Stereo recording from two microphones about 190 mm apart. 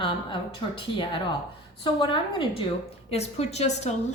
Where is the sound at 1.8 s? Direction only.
25° left (ahead or behind).